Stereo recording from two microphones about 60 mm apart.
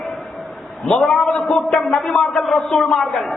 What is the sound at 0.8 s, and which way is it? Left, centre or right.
A man's voice, centre.